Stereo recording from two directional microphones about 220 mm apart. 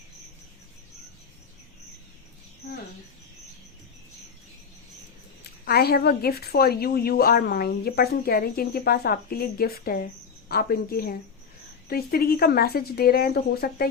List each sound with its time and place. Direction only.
5.4 s a woman's voice: 45° left (ahead or behind)